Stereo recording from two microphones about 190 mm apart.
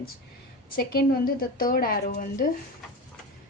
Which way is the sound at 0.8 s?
55° left (ahead or behind).